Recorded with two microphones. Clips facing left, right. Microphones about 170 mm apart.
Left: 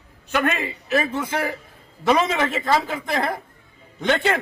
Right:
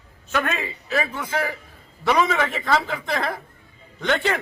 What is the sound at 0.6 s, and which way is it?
Speech, 20° left (ahead or behind).